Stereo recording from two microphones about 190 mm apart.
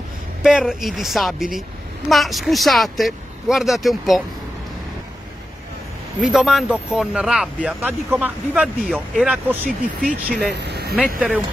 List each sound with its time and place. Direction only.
0.4 s speech: 5° right (ahead or behind)
6.2 s speech: 5° right (ahead or behind)
9.7 s speech: 5° left (ahead or behind)
10.5 s speech: 60° right (ahead or behind)
11.0 s speech: 5° right (ahead or behind)